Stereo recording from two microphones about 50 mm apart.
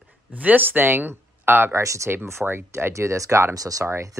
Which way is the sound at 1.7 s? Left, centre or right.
Right.